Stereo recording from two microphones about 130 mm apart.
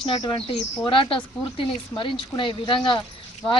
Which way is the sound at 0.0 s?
40° left (ahead or behind).